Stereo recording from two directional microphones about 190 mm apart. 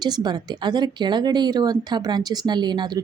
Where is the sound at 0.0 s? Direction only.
20° right (ahead or behind).